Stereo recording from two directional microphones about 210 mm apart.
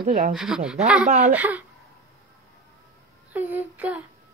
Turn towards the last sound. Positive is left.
turn(degrees=-5)  # may be behind; listen again after turning